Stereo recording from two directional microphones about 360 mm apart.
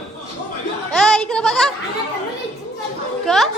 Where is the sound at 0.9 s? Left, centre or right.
Centre.